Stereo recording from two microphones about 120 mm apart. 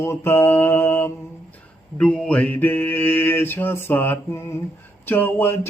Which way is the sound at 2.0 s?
10° left (ahead or behind).